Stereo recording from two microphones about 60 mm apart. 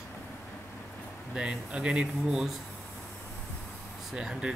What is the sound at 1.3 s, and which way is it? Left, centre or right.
Speech, centre.